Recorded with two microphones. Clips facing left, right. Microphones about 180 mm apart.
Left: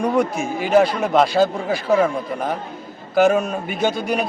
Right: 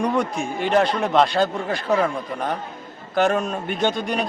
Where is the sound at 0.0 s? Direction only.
Centre (ahead or behind).